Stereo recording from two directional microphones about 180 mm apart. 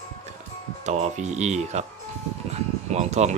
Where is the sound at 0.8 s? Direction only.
40° right (ahead or behind).